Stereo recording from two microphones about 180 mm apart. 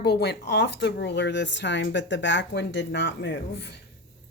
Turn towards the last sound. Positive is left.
turn(degrees=70)  # may be behind; listen again after turning